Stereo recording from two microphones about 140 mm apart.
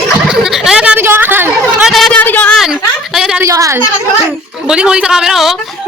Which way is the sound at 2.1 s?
10° left (ahead or behind).